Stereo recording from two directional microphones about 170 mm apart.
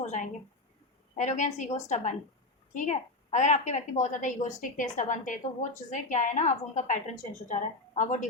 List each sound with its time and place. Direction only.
0.0 s a woman's voice: 45° left (ahead or behind)